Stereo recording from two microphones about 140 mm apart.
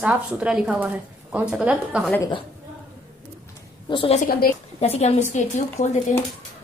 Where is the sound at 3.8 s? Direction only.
35° left (ahead or behind).